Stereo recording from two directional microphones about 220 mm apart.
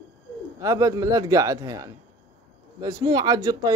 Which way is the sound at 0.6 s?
15° right (ahead or behind).